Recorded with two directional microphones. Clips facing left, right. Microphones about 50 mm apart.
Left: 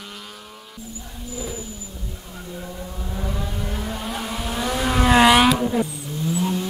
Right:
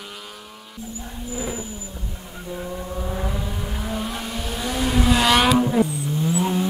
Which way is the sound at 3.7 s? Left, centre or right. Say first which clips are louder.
Right 2 dB; centre.